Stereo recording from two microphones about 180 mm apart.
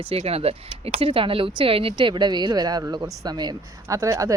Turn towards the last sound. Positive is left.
turn(degrees=-15)  # may be behind; listen again after turning